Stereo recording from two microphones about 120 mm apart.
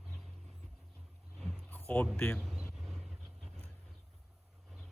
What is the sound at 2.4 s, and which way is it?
Vehicle, centre (ahead or behind).